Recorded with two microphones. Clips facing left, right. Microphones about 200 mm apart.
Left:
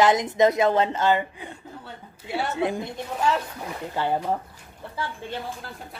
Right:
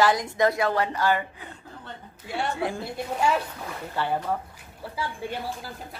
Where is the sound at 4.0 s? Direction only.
20° left (ahead or behind).